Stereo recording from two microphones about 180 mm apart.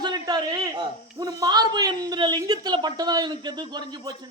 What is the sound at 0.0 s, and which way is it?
A man's voice, 20° right (ahead or behind).